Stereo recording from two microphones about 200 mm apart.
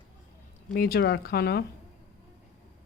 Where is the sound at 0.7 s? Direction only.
50° left (ahead or behind).